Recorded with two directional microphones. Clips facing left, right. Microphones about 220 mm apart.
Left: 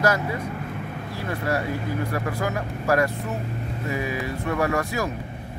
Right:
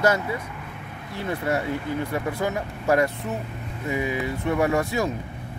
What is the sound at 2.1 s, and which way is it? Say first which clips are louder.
Speech: right 1 dB; 20° right (ahead or behind).